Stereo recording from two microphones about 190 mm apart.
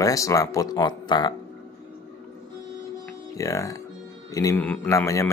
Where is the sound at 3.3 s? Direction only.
15° left (ahead or behind).